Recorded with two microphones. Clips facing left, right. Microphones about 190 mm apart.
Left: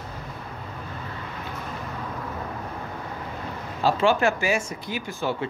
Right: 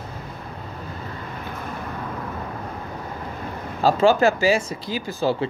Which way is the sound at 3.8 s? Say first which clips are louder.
Right 4 dB; 35° right (ahead or behind).